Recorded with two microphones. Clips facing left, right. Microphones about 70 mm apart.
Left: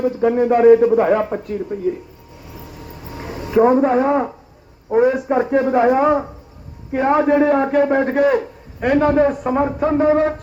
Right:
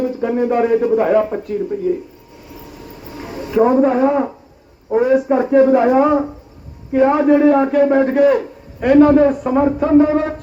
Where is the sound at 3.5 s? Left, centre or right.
Left.